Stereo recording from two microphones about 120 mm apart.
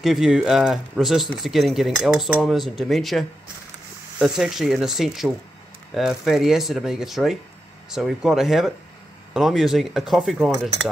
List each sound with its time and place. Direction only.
0.0 s speech: 5° right (ahead or behind)